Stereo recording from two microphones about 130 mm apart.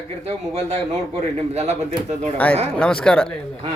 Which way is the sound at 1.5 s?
60° right (ahead or behind).